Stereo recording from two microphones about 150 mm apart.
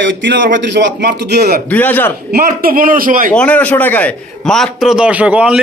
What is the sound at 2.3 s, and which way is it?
Speech, 75° right (ahead or behind).